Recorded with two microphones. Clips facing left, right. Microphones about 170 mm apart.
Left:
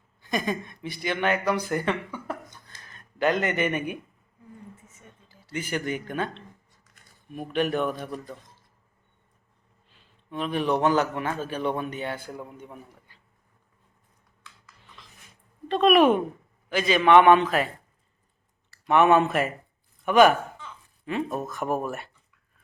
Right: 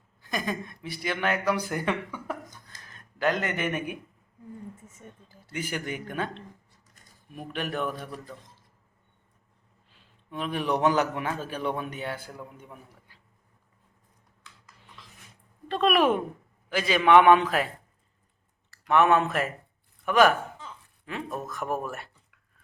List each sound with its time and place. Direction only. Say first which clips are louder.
0.2 s speech: left 3 dB; centre (ahead or behind)
2.8 s speech: left 2 dB; centre (ahead or behind)
5.3 s a sound: left 3 dB; 50° right (ahead or behind)
5.5 s a man's voice: left 3 dB; 10° right (ahead or behind)
7.5 s speech: left 6 dB; 5° right (ahead or behind)
10.3 s a man's voice: left 3 dB; 5° right (ahead or behind)
15.7 s a man's voice: left 4 dB; centre (ahead or behind)
18.9 s speech: left 2 dB; centre (ahead or behind)